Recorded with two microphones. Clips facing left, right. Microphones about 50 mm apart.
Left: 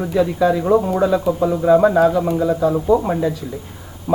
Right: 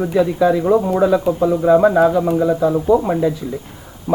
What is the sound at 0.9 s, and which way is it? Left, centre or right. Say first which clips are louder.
Speech: right 2 dB; centre.